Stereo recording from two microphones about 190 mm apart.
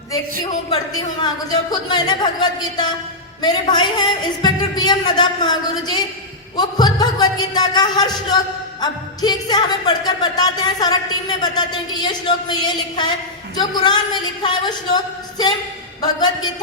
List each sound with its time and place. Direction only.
0.7 s a woman's voice: 20° left (ahead or behind)